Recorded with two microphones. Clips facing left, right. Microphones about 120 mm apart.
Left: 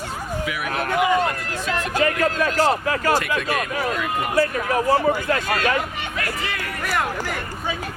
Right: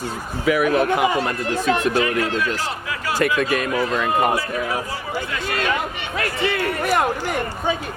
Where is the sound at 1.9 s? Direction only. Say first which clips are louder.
Even; 45° left (ahead or behind).